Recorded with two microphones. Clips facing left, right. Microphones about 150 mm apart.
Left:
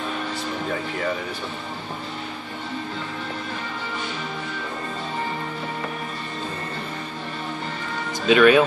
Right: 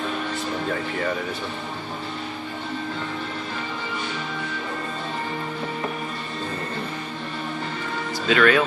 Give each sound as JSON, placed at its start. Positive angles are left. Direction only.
{"t": 8.3, "sound": "speech", "side_deg": 20}